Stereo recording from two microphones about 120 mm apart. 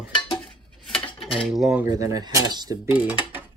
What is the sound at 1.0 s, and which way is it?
Dishes, 45° left (ahead or behind).